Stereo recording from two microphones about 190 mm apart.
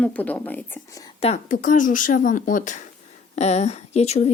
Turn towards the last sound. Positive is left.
turn(degrees=35)  # may be behind; listen again after turning